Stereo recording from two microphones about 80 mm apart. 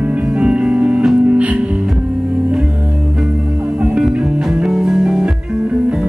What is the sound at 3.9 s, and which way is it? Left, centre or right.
Music, centre.